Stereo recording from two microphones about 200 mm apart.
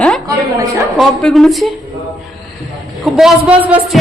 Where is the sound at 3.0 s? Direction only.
Centre (ahead or behind).